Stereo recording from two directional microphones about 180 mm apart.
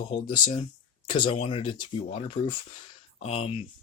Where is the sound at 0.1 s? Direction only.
30° left (ahead or behind).